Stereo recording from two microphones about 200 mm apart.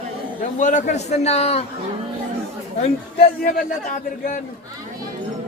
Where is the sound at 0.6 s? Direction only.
40° left (ahead or behind).